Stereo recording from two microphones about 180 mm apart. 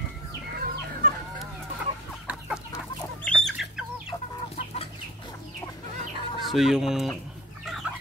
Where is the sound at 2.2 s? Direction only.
5° right (ahead or behind).